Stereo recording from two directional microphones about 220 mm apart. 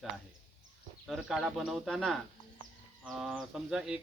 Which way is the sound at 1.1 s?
Centre (ahead or behind).